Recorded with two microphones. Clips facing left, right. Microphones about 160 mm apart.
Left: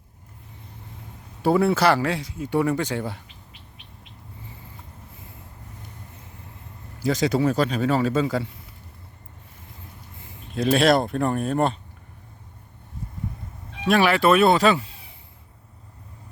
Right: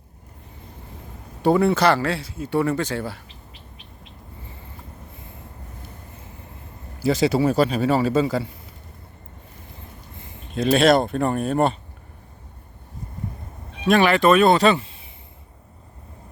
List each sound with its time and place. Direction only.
1.4 s speech: 5° left (ahead or behind); by 3.2 s 20° left (ahead or behind)
7.0 s a man's voice: 5° right (ahead or behind)
10.2 s speech: centre (ahead or behind)
13.8 s speech: 5° left (ahead or behind)